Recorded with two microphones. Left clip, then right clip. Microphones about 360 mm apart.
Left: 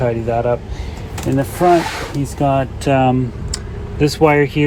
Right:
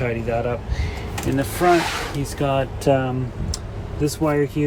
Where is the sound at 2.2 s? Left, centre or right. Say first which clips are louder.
Left 6 dB; centre.